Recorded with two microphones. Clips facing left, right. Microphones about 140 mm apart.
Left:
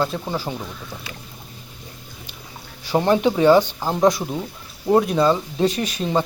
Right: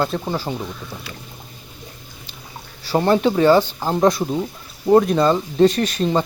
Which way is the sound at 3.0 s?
10° left (ahead or behind).